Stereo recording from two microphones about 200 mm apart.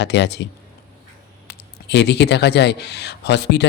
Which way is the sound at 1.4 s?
60° left (ahead or behind).